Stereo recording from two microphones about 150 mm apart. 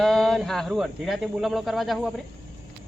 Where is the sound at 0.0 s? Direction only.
Centre (ahead or behind).